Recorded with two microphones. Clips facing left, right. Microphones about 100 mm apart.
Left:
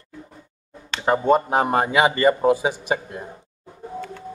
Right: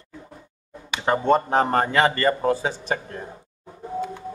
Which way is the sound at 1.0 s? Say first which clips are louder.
Left 2 dB; 5° left (ahead or behind).